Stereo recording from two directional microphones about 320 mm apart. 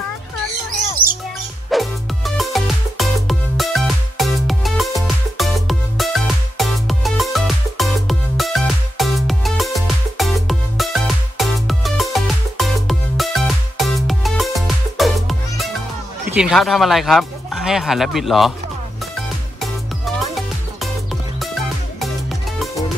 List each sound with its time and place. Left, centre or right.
1.0 s music: centre
1.7 s music: centre
16.3 s speech: centre